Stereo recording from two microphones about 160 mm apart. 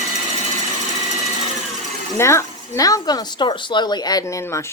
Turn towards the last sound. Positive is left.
turn(degrees=25)  # may be behind; listen again after turning